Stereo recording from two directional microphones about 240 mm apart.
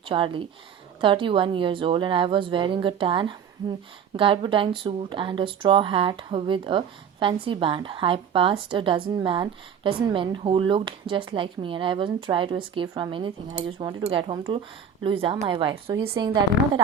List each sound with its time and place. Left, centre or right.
0.1 s speech: right